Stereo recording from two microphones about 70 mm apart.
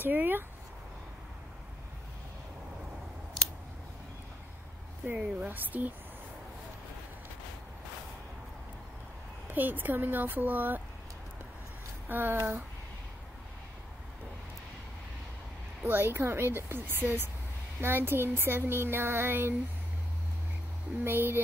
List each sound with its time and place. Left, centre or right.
0.0 s speech: right
5.0 s speech: centre
9.5 s speech: right
12.1 s speech: right
15.8 s speech: right
21.0 s speech: right